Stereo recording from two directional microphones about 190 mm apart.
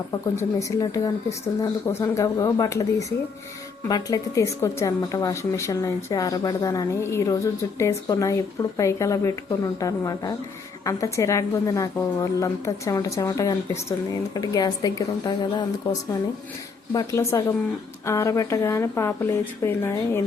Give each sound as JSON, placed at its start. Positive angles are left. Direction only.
{"t": 0.3, "sound": "a woman's voice", "side_deg": 20}